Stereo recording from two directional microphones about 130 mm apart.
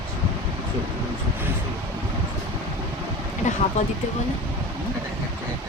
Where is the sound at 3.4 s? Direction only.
75° left (ahead or behind).